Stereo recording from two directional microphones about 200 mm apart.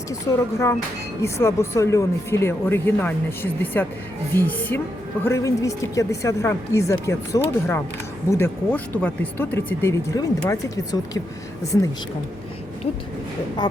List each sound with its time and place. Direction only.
1.2 s speech: 15° left (ahead or behind)
13.6 s speech: 20° left (ahead or behind)